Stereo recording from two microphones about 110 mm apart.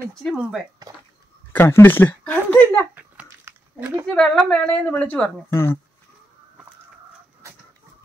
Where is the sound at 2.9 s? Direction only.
15° right (ahead or behind).